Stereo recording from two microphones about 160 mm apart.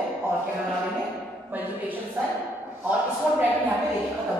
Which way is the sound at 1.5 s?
10° right (ahead or behind).